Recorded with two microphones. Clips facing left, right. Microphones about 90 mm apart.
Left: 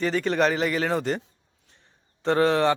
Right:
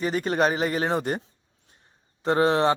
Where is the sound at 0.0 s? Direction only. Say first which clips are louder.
Left 1 dB; 20° right (ahead or behind).